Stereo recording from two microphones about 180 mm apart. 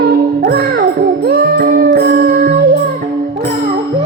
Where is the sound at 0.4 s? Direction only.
55° right (ahead or behind).